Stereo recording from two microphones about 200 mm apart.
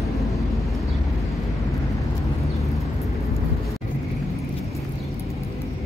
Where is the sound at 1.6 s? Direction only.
15° left (ahead or behind).